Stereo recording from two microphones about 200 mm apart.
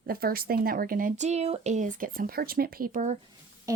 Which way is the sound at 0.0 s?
50° right (ahead or behind).